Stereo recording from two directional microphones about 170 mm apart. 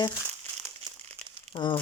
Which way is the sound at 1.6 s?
25° left (ahead or behind).